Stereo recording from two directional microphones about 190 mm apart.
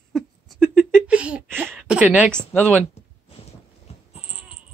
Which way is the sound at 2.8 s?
35° left (ahead or behind).